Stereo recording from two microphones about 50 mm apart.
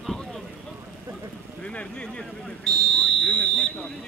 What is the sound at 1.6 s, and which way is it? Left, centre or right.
Speech, left.